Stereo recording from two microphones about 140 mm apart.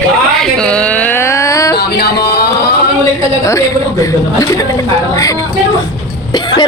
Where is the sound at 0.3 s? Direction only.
5° left (ahead or behind); by 1.7 s 20° left (ahead or behind).